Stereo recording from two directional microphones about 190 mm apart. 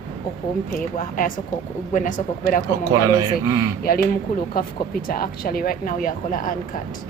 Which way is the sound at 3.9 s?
50° left (ahead or behind).